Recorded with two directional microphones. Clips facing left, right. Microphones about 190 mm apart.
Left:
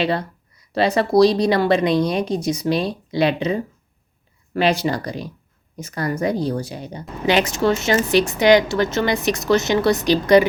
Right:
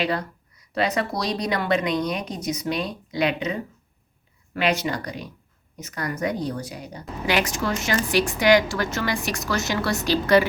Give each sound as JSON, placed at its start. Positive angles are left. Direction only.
{"t": 0.0, "sound": "a woman's voice", "side_deg": 30}